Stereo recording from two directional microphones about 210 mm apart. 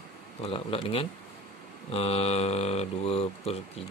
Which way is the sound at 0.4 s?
25° left (ahead or behind).